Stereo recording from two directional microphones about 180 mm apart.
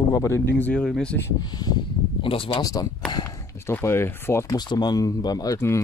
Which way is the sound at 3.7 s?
15° left (ahead or behind).